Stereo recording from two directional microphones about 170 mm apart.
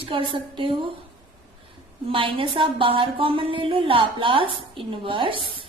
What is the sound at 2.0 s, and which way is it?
A woman's voice, 30° right (ahead or behind).